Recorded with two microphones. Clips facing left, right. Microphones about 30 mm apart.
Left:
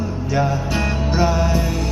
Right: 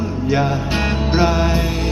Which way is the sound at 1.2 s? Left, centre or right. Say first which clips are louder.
Right 2 dB; right.